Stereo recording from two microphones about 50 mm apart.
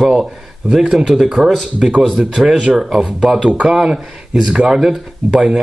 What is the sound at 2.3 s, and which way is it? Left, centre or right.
Speech, centre.